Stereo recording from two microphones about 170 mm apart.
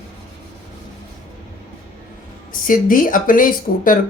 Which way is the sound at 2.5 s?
55° left (ahead or behind).